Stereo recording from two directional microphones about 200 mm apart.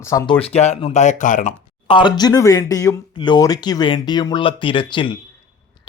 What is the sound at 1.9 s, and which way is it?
Speech, 25° left (ahead or behind).